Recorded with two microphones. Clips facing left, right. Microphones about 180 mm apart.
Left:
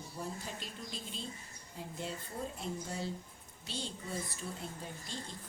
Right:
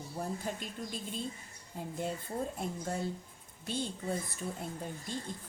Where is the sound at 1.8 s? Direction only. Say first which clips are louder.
Right 5 dB; 50° right (ahead or behind).